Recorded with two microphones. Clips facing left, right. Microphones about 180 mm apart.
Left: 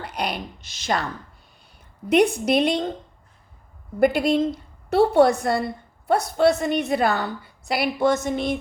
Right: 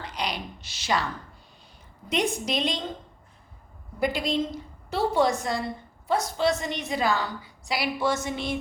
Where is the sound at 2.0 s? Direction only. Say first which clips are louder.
Left 9 dB; 60° left (ahead or behind).